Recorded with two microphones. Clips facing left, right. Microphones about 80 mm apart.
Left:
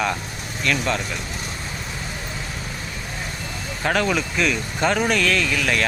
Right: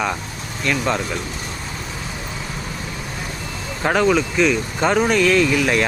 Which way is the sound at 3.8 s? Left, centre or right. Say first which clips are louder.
Right 4 dB; centre.